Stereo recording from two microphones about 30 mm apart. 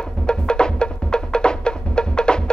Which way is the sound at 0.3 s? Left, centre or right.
Left.